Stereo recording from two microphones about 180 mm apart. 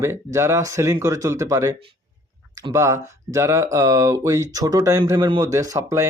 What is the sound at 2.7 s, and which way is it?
Speech, 15° right (ahead or behind).